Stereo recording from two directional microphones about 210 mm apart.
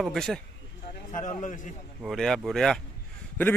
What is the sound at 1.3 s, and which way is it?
Speech, 35° left (ahead or behind).